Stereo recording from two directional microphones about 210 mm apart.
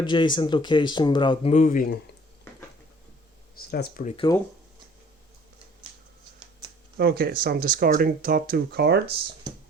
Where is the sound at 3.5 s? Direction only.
45° left (ahead or behind).